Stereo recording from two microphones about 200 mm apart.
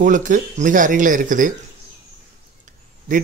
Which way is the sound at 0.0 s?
40° right (ahead or behind).